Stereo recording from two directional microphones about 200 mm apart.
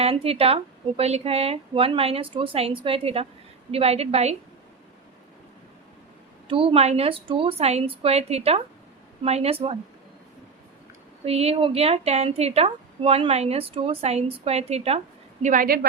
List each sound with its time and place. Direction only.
0.0 s a woman's voice: 30° right (ahead or behind)
6.5 s speech: 25° right (ahead or behind)
11.3 s a woman's voice: 30° right (ahead or behind); by 15.9 s 45° right (ahead or behind)